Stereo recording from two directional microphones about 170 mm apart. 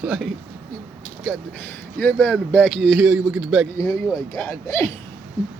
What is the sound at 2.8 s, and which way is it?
Speech, 5° right (ahead or behind).